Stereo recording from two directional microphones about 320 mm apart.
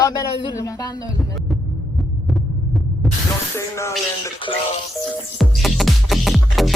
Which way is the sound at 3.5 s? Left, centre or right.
Centre.